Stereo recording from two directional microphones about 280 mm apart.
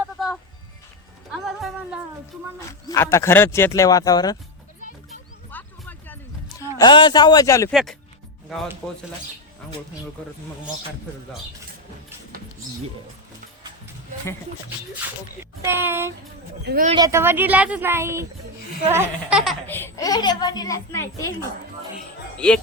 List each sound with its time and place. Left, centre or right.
0.2 s music: centre
2.9 s speech: centre
5.5 s a sound: centre
6.7 s speech: centre
7.7 s speech: centre
15.6 s speech: centre
16.6 s speech: right
16.9 s speech: centre
22.4 s speech: centre